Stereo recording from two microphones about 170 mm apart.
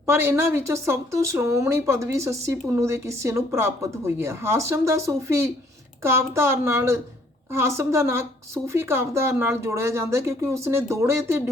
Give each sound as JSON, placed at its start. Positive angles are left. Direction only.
{"t": 0.0, "sound": "a woman's voice", "side_deg": -15}